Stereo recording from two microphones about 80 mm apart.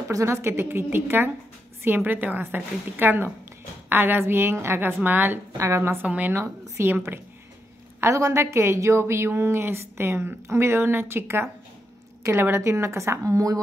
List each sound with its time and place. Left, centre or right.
0.1 s a woman's voice: right
6.0 s a woman's voice: centre
6.8 s a woman's voice: right